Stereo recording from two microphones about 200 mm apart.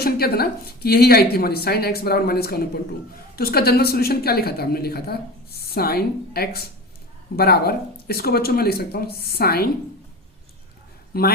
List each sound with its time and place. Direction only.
0.0 s a woman's voice: 50° left (ahead or behind)
11.1 s a woman's voice: 50° left (ahead or behind)